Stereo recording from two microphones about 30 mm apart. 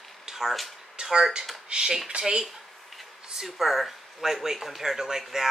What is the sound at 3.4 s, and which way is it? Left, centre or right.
Speech, centre.